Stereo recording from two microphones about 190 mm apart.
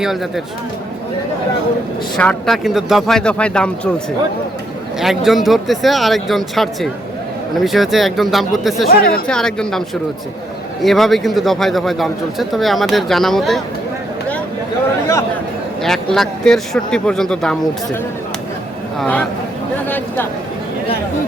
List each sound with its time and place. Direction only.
0.0 s speech: centre (ahead or behind)
2.1 s speech: 5° left (ahead or behind)
8.9 s speech: 55° left (ahead or behind)
9.2 s speech: 5° left (ahead or behind)
15.8 s speech: centre (ahead or behind)
18.9 s speech: 5° left (ahead or behind)